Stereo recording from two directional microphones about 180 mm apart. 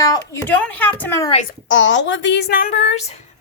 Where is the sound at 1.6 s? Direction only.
90° left; by 3.2 s 40° left (ahead or behind).